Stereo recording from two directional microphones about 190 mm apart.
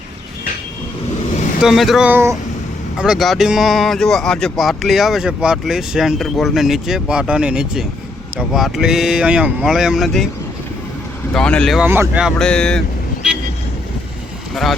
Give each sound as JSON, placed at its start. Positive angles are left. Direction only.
{"t": 1.6, "sound": "speech", "side_deg": 0}
{"t": 3.0, "sound": "speech", "side_deg": 0}
{"t": 11.3, "sound": "speech", "side_deg": 5}
{"t": 14.5, "sound": "speech", "side_deg": 0}